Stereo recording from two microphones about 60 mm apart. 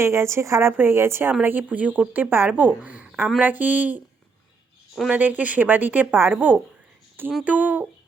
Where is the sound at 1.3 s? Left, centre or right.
Right.